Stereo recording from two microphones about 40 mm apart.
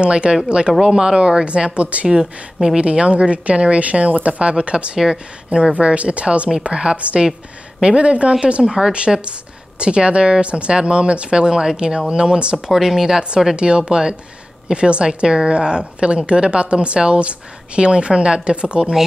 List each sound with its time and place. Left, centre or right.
0.0 s speech: right
2.0 s speech: centre
4.9 s speech: centre
8.6 s speech: centre
9.8 s speech: right
12.7 s speech: centre
13.6 s speech: right